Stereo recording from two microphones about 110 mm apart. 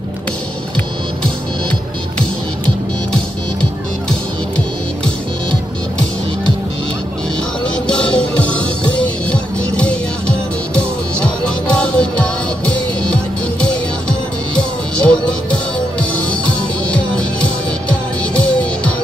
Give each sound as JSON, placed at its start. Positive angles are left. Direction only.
{"t": 7.7, "sound": "music", "side_deg": 10}